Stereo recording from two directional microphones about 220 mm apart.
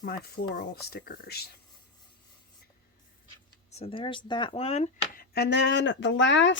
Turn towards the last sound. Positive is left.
turn(degrees=55)  # may be behind; listen again after turning